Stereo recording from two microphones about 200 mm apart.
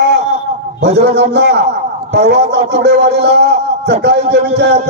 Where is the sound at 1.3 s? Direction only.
55° right (ahead or behind).